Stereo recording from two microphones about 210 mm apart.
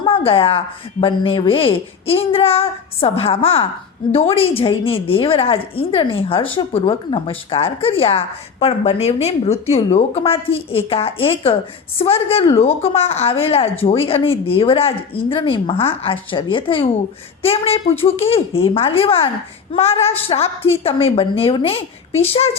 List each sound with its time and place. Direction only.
0.0 s speech: 25° left (ahead or behind)